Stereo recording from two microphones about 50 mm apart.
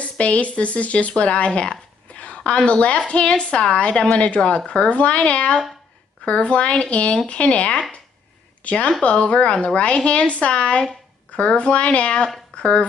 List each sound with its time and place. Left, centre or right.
0.0 s speech: left